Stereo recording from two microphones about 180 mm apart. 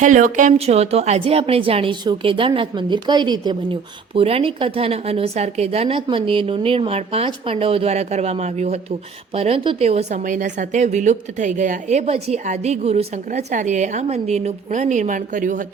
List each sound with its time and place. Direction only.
0.0 s a woman's voice: 45° right (ahead or behind)